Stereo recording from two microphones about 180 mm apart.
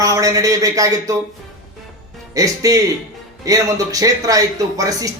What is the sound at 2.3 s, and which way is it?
A man's voice, 20° right (ahead or behind).